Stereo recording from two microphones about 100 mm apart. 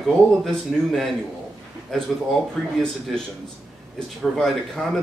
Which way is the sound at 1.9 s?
5° left (ahead or behind).